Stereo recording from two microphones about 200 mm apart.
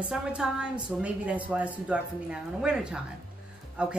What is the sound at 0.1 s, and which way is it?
A woman's voice, 5° right (ahead or behind).